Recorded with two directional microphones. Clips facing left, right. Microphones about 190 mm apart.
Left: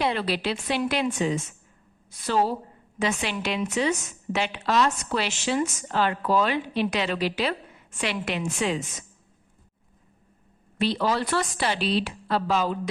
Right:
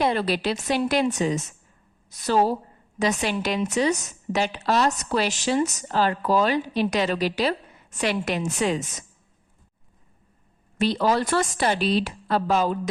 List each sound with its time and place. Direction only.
0.0 s a woman's voice: 45° right (ahead or behind)
10.8 s a woman's voice: 45° right (ahead or behind)